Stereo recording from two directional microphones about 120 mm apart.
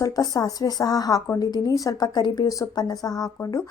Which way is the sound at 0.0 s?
30° left (ahead or behind).